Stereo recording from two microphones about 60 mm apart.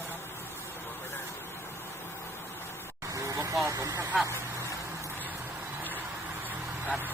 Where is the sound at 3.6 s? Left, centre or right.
Right.